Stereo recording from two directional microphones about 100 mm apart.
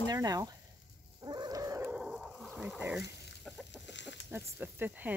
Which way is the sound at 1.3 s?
45° right (ahead or behind).